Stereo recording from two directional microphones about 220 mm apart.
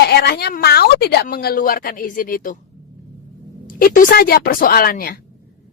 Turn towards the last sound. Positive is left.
turn(degrees=40)  # may be behind; listen again after turning